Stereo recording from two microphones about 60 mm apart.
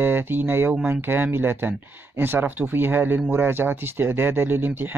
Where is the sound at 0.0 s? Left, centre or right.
Right.